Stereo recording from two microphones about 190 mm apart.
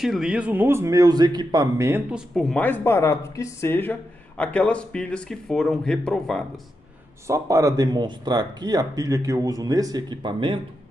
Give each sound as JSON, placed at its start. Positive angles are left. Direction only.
{"t": 0.0, "sound": "speech", "side_deg": -5}
{"t": 7.2, "sound": "speech", "side_deg": -15}